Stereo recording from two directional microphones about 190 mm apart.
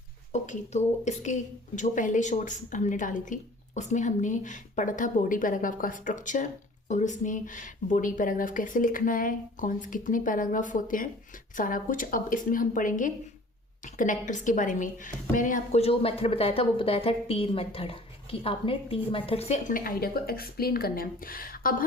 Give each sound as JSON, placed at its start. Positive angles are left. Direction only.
{"t": 0.3, "sound": "a woman's voice", "side_deg": 40}